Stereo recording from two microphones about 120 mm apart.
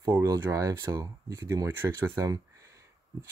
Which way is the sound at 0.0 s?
30° right (ahead or behind).